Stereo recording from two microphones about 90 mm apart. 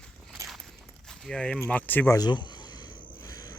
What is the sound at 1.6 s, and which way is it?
Speech, 20° left (ahead or behind).